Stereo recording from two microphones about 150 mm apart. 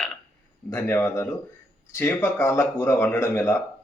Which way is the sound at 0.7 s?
15° left (ahead or behind).